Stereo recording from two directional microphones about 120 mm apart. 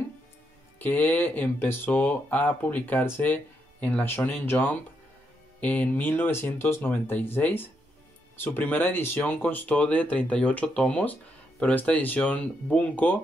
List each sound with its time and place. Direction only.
0.7 s speech: 15° left (ahead or behind)